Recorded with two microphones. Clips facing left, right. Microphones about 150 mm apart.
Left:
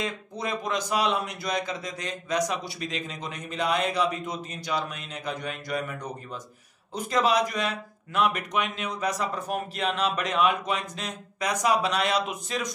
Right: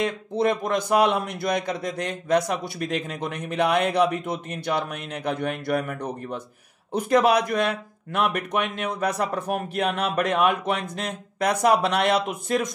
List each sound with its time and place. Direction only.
0.0 s a man's voice: 60° right (ahead or behind)